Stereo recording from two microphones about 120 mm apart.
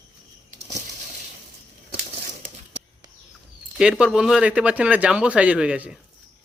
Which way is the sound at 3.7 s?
5° right (ahead or behind).